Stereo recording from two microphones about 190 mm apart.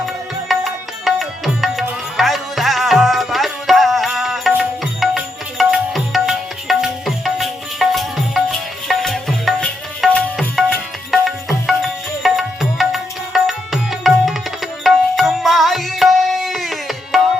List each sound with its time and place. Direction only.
0.0 s music: centre (ahead or behind)
14.8 s tabla: centre (ahead or behind)